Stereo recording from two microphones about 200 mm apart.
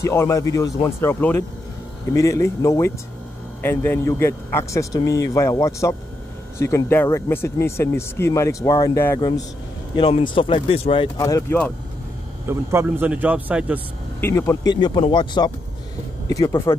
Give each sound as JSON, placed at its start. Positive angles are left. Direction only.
{"t": 0.0, "sound": "speech", "side_deg": 15}
{"t": 12.4, "sound": "speech", "side_deg": -10}
{"t": 14.2, "sound": "speech", "side_deg": 15}